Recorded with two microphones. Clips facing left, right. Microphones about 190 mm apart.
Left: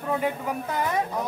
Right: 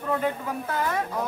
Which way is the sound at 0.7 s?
15° left (ahead or behind).